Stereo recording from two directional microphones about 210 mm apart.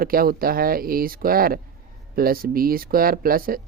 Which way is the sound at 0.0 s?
45° right (ahead or behind).